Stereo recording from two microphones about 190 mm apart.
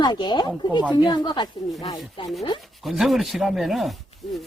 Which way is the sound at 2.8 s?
Centre (ahead or behind).